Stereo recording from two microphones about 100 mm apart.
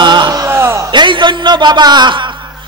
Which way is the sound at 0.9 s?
50° right (ahead or behind).